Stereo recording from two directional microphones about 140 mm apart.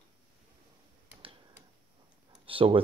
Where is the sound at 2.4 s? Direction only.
40° right (ahead or behind).